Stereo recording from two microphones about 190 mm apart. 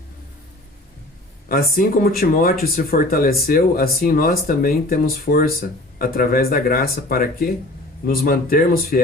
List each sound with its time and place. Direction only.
1.5 s speech: 50° left (ahead or behind)